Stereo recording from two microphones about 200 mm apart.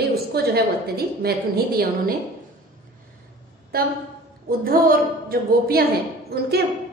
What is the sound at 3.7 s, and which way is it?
A woman's voice, 50° right (ahead or behind).